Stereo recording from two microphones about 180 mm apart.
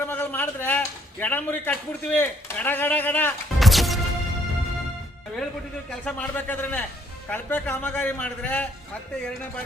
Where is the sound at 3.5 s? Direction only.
Centre (ahead or behind).